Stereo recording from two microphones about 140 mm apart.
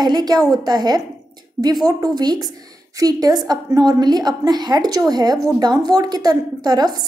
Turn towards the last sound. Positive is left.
turn(degrees=-30)  # may be behind; listen again after turning